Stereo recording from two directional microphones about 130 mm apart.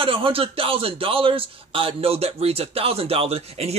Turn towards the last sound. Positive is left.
turn(degrees=-50)  # may be behind; listen again after turning